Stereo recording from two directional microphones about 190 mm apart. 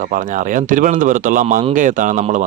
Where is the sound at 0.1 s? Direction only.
45° right (ahead or behind).